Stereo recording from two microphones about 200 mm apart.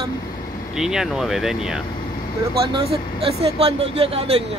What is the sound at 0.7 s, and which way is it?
Speech, 5° right (ahead or behind).